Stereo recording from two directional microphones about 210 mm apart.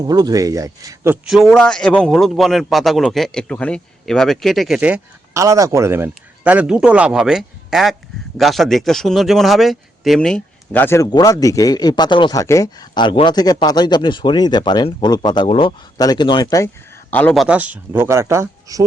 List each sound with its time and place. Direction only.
0.0 s speech: 20° right (ahead or behind); by 16.6 s 20° left (ahead or behind)
17.1 s speech: 5° left (ahead or behind); by 18.9 s 15° right (ahead or behind)